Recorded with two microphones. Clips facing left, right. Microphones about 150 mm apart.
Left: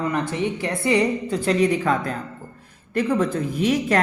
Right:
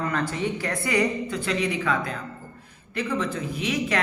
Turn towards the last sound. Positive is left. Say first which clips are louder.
# left 6 dB
turn(degrees=45)  # may be behind; listen again after turning